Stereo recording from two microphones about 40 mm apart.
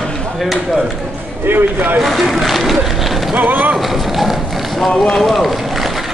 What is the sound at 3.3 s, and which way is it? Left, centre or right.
Speech, right.